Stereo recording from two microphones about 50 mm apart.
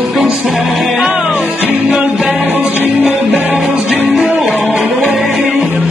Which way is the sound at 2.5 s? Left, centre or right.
Right.